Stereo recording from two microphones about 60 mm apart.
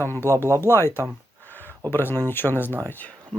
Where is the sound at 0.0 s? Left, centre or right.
Left.